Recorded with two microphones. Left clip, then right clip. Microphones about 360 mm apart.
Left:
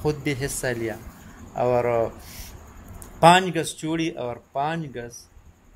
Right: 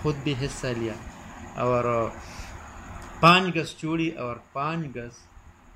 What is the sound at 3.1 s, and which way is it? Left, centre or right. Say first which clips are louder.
Speech: left 3 dB; left.